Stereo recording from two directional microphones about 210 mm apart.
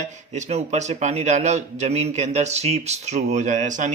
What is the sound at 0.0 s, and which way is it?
A man's voice, 35° right (ahead or behind).